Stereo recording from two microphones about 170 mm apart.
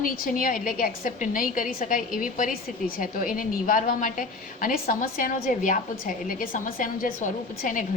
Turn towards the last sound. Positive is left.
turn(degrees=50)  # may be behind; listen again after turning